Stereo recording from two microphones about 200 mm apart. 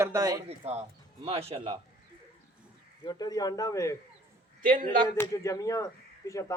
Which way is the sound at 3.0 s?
20° left (ahead or behind).